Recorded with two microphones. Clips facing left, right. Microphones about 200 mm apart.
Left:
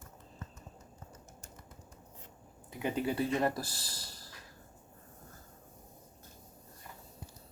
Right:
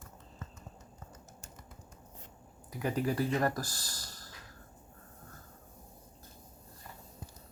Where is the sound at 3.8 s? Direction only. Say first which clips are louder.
Even; 30° left (ahead or behind).